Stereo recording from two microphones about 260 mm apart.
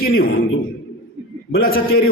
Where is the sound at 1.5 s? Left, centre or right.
Left.